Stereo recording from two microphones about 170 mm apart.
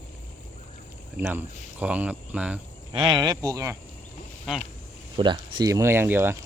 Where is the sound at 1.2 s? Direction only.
10° right (ahead or behind).